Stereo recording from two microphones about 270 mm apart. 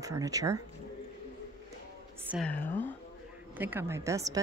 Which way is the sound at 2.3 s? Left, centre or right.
Centre.